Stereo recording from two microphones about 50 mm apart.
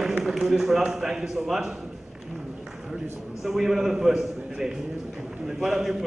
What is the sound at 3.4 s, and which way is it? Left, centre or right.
A man's voice, centre.